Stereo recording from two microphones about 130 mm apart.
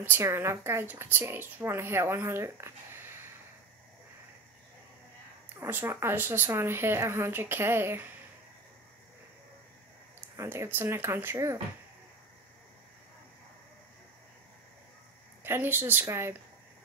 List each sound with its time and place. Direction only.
0.0 s a woman's voice: 15° right (ahead or behind)
5.6 s speech: 20° right (ahead or behind)
10.3 s a woman's voice: 20° right (ahead or behind)
15.4 s speech: 15° right (ahead or behind)